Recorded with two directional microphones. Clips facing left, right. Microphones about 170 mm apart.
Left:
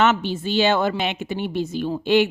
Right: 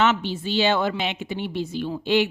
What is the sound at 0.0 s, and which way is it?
Speech, 50° left (ahead or behind).